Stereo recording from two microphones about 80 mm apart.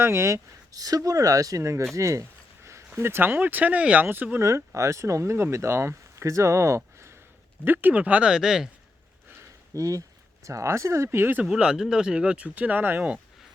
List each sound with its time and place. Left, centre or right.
0.0 s speech: right
3.0 s speech: right
4.4 s speech: right
7.6 s speech: right; by 8.7 s centre
9.4 s a sound: right
10.4 s speech: right
11.4 s speech: centre